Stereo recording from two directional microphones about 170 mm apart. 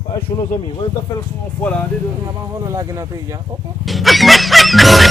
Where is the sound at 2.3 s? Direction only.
20° right (ahead or behind).